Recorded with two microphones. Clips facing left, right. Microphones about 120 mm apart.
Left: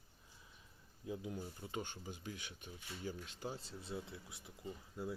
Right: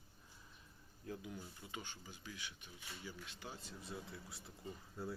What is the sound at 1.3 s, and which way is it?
Speech, 40° left (ahead or behind).